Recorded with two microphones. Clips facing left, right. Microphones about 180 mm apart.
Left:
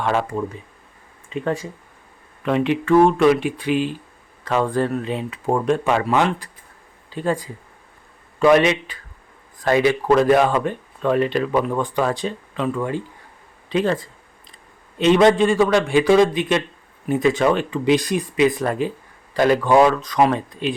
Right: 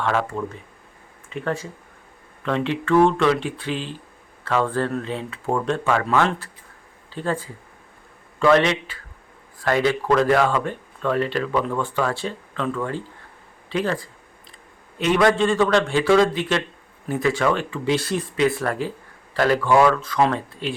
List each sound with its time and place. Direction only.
0.0 s a man's voice: 15° left (ahead or behind)
15.4 s speech: 10° left (ahead or behind)